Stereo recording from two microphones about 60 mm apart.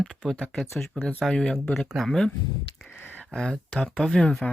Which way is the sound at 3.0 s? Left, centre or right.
Left.